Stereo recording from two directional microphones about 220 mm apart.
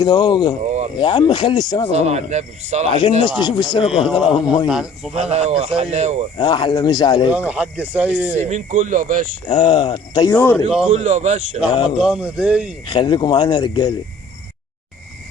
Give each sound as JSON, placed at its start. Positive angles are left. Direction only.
{"t": 0.0, "sound": "speech", "side_deg": 20}
{"t": 1.9, "sound": "speech", "side_deg": -30}
{"t": 3.2, "sound": "speech", "side_deg": 20}
{"t": 4.7, "sound": "speech", "side_deg": -5}
{"t": 5.1, "sound": "speech", "side_deg": -30}
{"t": 6.3, "sound": "speech", "side_deg": 20}
{"t": 7.3, "sound": "speech", "side_deg": -5}
{"t": 8.4, "sound": "speech", "side_deg": -35}
{"t": 9.5, "sound": "speech", "side_deg": 20}
{"t": 10.8, "sound": "speech", "side_deg": -30}
{"t": 11.9, "sound": "speech", "side_deg": -5}
{"t": 12.8, "sound": "speech", "side_deg": 20}